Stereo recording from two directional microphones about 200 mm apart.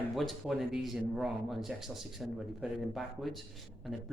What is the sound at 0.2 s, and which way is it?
Speech, centre (ahead or behind).